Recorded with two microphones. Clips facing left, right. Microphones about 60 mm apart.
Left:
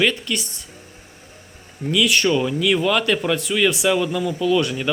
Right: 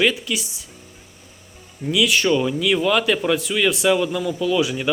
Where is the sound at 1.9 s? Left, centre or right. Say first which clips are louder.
Even; centre.